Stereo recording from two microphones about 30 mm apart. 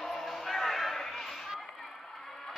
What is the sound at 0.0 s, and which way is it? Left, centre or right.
Music, centre.